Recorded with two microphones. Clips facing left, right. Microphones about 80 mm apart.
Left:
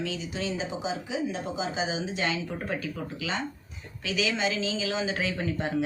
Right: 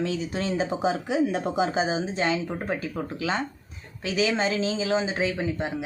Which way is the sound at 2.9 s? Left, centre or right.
Right.